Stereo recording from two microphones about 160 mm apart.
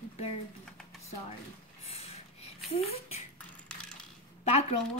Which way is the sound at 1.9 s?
40° left (ahead or behind).